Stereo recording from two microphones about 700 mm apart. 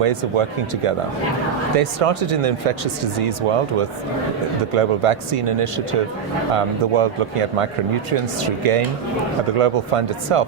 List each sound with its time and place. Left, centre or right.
0.0 s speech: right
1.7 s speech: right
8.4 s speech: right